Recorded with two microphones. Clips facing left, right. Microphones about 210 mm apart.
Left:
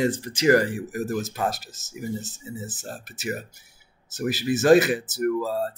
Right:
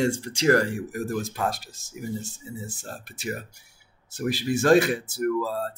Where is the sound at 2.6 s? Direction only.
5° left (ahead or behind).